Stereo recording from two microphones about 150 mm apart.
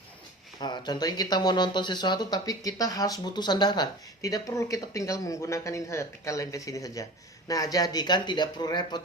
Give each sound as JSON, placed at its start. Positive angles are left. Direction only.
{"t": 0.6, "sound": "speech", "side_deg": 30}